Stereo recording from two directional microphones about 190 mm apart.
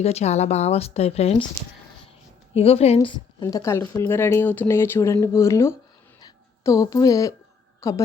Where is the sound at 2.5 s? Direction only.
30° left (ahead or behind); by 5.8 s 15° left (ahead or behind).